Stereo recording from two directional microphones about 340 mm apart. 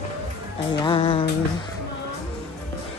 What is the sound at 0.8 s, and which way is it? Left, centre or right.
Speech, centre.